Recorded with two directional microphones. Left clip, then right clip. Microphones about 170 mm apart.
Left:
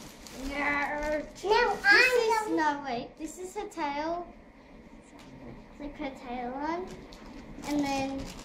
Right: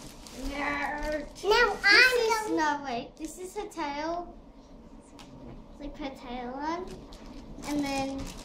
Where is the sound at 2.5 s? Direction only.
5° right (ahead or behind).